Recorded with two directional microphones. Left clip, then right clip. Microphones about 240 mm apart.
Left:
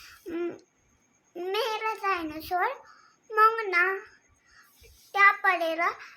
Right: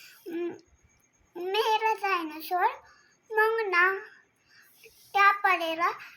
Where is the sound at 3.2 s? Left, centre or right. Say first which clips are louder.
Left 3 dB; centre.